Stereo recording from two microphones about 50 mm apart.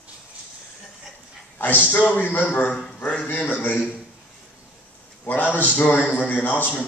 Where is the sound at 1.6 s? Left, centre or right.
Left.